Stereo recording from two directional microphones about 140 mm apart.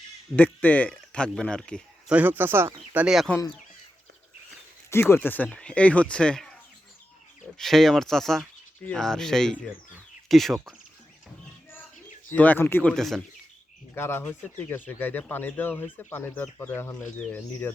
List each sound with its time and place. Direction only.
0.3 s speech: 10° left (ahead or behind)
2.0 s speech: 10° right (ahead or behind)
4.9 s speech: 15° left (ahead or behind)
7.6 s speech: centre (ahead or behind)
12.3 s speech: 10° left (ahead or behind)
13.9 s speech: 15° left (ahead or behind)